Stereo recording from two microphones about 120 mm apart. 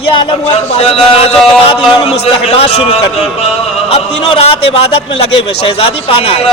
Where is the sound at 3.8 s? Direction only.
50° left (ahead or behind).